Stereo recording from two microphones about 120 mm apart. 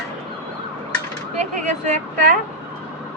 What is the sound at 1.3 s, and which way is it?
Speech, 75° right (ahead or behind).